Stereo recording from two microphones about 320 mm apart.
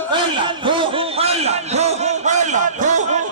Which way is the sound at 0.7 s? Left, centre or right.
Centre.